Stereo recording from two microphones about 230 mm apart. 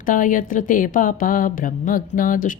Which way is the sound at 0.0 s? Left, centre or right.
Left.